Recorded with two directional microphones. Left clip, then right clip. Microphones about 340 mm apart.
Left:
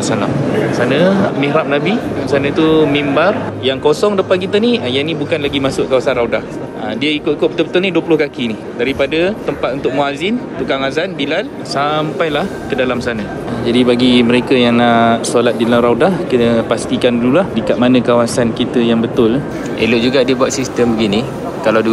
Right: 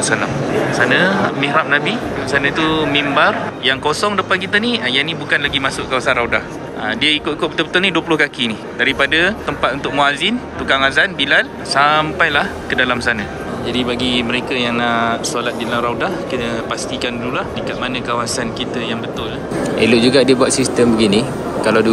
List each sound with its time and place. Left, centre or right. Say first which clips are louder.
0.7 s speech: even; centre
13.8 s speech: left 7 dB; centre